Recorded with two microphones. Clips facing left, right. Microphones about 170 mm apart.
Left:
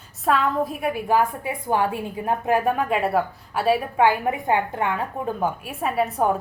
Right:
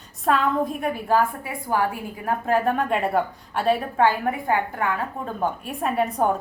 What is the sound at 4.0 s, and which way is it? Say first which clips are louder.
Speech: left 1 dB; 15° left (ahead or behind).